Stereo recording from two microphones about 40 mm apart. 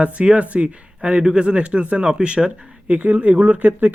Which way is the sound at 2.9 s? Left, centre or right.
Right.